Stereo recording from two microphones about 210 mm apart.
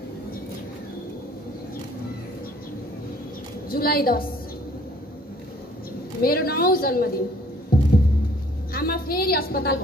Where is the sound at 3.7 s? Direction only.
45° left (ahead or behind).